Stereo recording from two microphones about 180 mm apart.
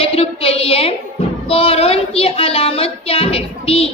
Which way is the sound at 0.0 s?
30° left (ahead or behind).